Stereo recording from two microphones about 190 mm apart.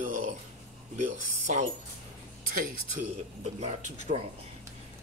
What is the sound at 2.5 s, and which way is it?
Speech, 45° right (ahead or behind).